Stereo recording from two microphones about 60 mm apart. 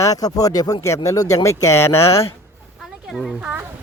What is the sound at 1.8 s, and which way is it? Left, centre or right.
Speech, left.